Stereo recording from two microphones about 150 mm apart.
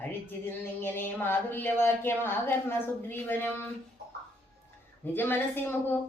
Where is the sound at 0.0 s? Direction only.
15° left (ahead or behind).